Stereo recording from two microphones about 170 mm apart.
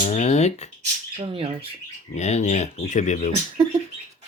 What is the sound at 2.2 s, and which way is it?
Speech, 40° left (ahead or behind).